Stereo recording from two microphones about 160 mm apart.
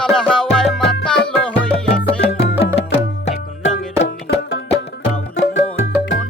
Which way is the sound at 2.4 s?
90° left.